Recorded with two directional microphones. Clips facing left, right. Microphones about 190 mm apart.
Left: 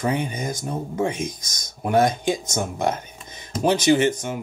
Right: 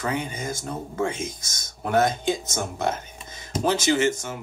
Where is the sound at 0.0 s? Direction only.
20° left (ahead or behind).